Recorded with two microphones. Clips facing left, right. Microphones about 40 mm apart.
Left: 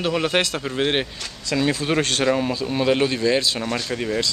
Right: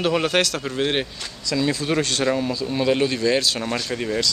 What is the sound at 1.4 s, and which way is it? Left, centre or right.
Speech, left.